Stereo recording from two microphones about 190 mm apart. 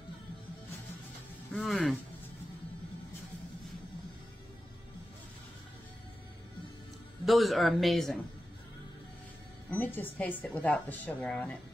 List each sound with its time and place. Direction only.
1.5 s a man's voice: centre (ahead or behind)
7.2 s a man's voice: centre (ahead or behind)
9.7 s a woman's voice: 10° left (ahead or behind)